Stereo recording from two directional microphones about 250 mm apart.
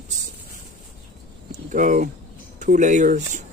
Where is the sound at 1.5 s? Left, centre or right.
Right.